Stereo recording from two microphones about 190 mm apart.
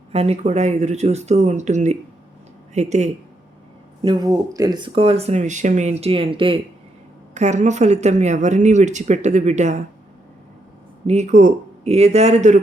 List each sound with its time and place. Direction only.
0.1 s speech: 35° right (ahead or behind)
4.0 s speech: 20° right (ahead or behind)
7.3 s speech: 40° right (ahead or behind)
11.0 s speech: 35° right (ahead or behind)